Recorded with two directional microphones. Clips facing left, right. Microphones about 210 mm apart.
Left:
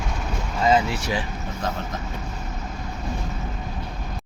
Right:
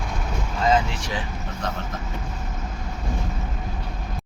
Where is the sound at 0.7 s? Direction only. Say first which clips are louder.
Left 2 dB; 5° left (ahead or behind).